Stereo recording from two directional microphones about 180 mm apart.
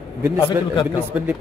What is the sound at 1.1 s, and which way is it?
Speech, 5° right (ahead or behind).